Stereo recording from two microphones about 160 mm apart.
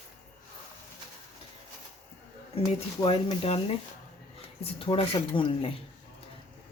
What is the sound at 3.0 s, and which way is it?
Speech, 35° left (ahead or behind).